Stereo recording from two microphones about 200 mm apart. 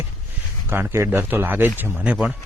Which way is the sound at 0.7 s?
10° right (ahead or behind).